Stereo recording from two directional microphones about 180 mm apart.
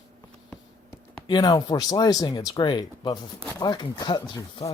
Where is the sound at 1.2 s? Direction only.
25° left (ahead or behind).